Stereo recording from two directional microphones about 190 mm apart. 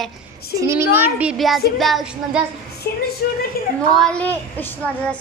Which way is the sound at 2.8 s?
55° left (ahead or behind).